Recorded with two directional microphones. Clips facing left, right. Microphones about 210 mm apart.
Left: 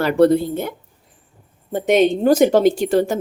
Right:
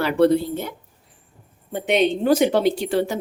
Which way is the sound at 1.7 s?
45° left (ahead or behind).